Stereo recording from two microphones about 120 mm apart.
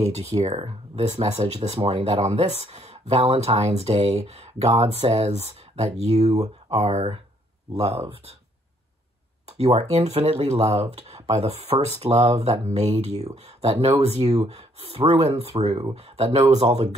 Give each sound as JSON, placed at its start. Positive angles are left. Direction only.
{"t": 0.0, "sound": "speech", "side_deg": -60}
{"t": 9.5, "sound": "speech", "side_deg": -65}